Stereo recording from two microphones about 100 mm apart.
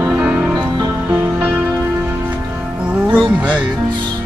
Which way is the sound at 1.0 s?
25° right (ahead or behind).